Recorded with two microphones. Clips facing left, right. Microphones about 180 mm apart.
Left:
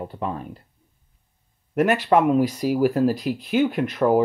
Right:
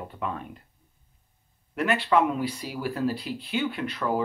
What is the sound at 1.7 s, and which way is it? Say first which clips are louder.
Speech: left 5 dB; 45° left (ahead or behind).